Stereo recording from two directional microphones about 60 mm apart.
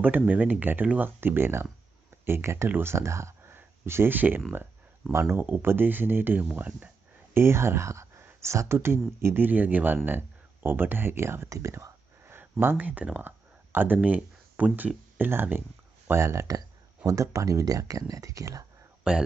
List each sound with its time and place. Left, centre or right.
0.0 s speech: right
3.5 s a sound: right
5.1 s speech: right
5.4 s speech: right
7.3 s speech: right
11.4 s whispering: right
13.2 s speech: right
16.1 s speech: right
16.4 s speech: right
19.1 s speech: centre